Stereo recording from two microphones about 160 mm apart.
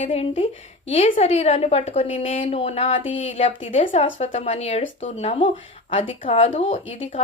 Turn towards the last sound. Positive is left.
turn(degrees=35)  # may be behind; listen again after turning